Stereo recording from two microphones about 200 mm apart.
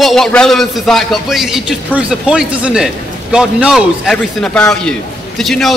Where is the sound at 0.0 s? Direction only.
Centre (ahead or behind).